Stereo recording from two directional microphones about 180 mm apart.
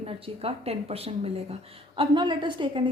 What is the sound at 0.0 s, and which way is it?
A woman's voice, 35° right (ahead or behind).